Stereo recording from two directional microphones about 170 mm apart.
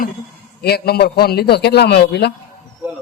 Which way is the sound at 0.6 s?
70° left (ahead or behind).